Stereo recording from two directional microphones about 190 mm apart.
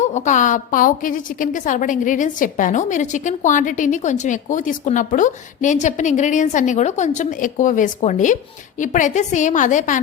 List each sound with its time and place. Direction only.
0.0 s a woman's voice: 40° left (ahead or behind)